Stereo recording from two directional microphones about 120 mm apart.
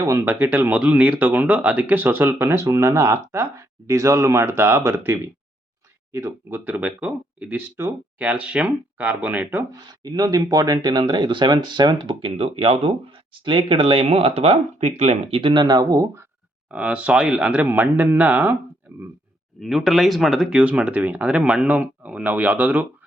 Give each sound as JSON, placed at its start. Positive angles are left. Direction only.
{"t": 0.3, "sound": "speech", "side_deg": -15}
{"t": 10.0, "sound": "speech", "side_deg": -35}
{"t": 16.7, "sound": "speech", "side_deg": -10}
{"t": 19.5, "sound": "speech", "side_deg": 0}